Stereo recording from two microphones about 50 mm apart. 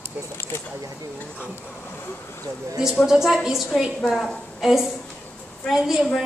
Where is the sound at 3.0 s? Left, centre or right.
Centre.